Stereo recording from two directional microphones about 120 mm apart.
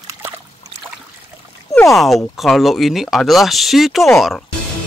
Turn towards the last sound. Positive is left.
turn(degrees=0)  # may be behind; listen again after turning